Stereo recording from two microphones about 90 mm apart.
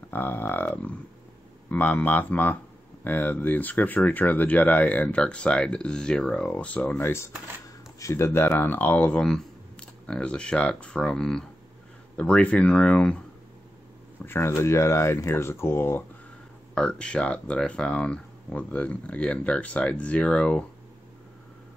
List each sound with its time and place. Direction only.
0.1 s speech: 20° left (ahead or behind)
1.7 s speech: 15° left (ahead or behind)
7.0 s speech: 25° left (ahead or behind)
14.2 s speech: 25° left (ahead or behind)
16.7 s speech: 10° left (ahead or behind)